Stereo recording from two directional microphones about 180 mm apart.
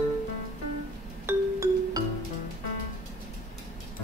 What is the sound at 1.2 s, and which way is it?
Music, 15° right (ahead or behind).